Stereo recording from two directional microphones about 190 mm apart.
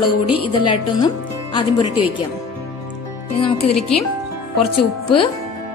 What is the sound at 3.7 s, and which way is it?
Speech, 30° left (ahead or behind).